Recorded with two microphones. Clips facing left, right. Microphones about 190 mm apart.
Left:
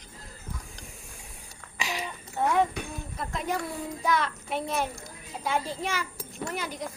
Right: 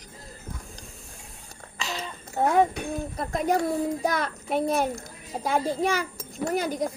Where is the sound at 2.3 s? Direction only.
45° right (ahead or behind).